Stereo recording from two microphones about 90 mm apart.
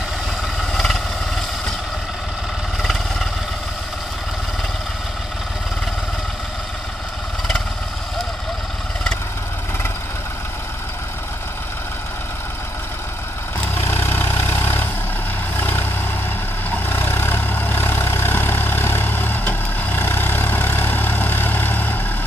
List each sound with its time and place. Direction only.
0.6 s vehicle: centre (ahead or behind)
2.8 s vehicle: centre (ahead or behind)
13.7 s vehicle: 30° left (ahead or behind)